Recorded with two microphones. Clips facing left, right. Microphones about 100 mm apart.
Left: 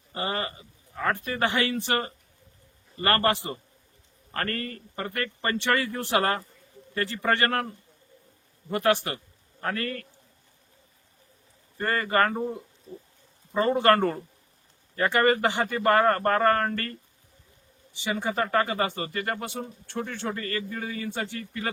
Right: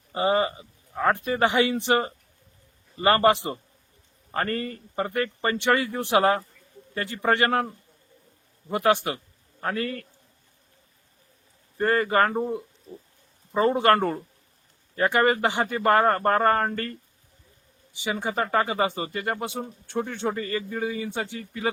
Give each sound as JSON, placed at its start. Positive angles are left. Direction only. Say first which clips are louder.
{"t": 0.1, "sound": "speech", "louder": "right 8 dB", "side_deg": -20}
{"t": 8.7, "sound": "a man's voice", "louder": "right 2 dB", "side_deg": -15}
{"t": 11.8, "sound": "speech", "louder": "right 3 dB", "side_deg": -10}
{"t": 13.7, "sound": "speech", "louder": "right 1 dB", "side_deg": -10}
{"t": 17.9, "sound": "speech", "louder": "right 1 dB", "side_deg": -10}